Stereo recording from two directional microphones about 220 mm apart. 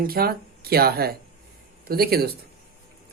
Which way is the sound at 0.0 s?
45° right (ahead or behind).